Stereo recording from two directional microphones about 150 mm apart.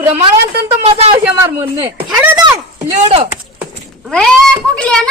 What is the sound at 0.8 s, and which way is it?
Speech, 45° right (ahead or behind).